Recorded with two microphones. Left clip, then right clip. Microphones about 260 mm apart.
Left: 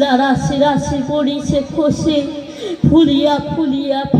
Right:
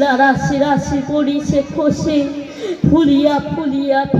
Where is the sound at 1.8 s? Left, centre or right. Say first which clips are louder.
Left 1 dB; left.